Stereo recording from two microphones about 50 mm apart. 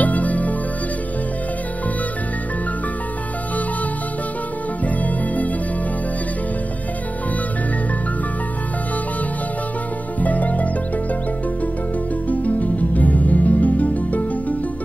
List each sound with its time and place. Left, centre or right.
0.0 s music: left
5.0 s music: left
10.2 s music: left
12.3 s music: left